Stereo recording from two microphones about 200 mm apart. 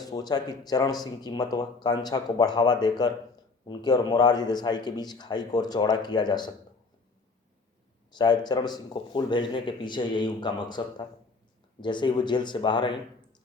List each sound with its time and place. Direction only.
0.0 s speech: 20° left (ahead or behind)
8.1 s speech: 20° left (ahead or behind)